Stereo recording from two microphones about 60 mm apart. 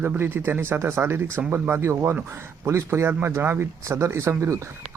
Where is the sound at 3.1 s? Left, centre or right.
Right.